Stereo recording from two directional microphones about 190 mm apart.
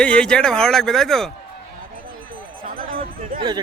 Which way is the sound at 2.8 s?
50° right (ahead or behind).